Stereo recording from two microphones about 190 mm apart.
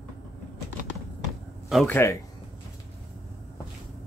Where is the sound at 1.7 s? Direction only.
5° left (ahead or behind).